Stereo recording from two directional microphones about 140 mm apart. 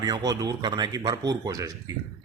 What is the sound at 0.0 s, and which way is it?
A man's voice, 25° right (ahead or behind).